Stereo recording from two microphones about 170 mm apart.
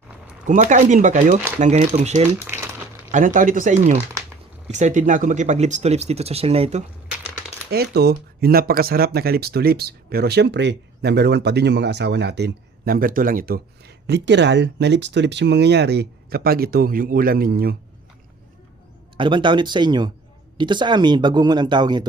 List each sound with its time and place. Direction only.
0.4 s speech: 45° right (ahead or behind)
2.4 s speech: 15° right (ahead or behind)
3.1 s speech: 50° right (ahead or behind)
7.7 s speech: 70° right (ahead or behind)
19.1 s speech: 30° right (ahead or behind)